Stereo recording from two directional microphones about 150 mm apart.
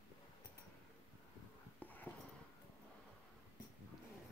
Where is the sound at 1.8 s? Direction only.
10° left (ahead or behind).